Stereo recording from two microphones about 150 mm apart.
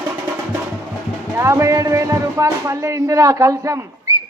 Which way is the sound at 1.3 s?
20° right (ahead or behind).